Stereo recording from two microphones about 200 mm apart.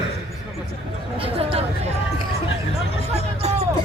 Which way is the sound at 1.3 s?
30° right (ahead or behind).